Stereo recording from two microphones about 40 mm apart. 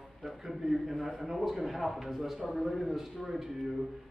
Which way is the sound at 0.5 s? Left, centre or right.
Centre.